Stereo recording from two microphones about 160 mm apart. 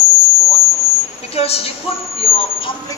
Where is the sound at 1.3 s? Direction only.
40° left (ahead or behind).